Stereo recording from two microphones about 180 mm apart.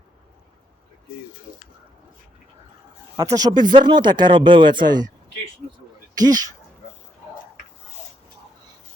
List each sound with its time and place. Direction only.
3.3 s speech: 25° right (ahead or behind)
6.1 s speech: 20° right (ahead or behind)